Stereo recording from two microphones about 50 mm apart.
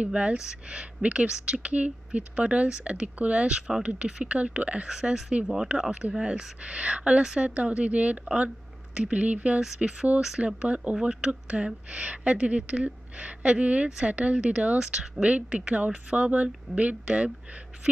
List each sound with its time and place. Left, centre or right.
0.0 s speech: right
4.8 s speech: centre
10.4 s speech: right